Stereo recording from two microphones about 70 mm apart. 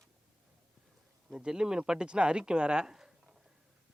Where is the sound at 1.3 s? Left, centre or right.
Centre.